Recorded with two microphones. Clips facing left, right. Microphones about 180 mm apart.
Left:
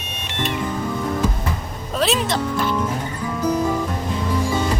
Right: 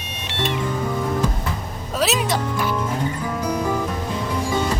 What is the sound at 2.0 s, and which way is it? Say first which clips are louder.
Speech: left 1 dB; 5° right (ahead or behind).